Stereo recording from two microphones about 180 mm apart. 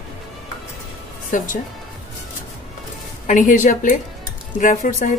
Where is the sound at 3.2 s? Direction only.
45° left (ahead or behind).